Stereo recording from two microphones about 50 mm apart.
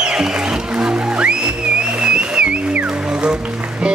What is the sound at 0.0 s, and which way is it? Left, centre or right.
Music, centre.